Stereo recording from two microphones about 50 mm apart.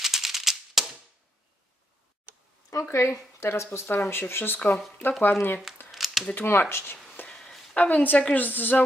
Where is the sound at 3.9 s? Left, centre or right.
Left.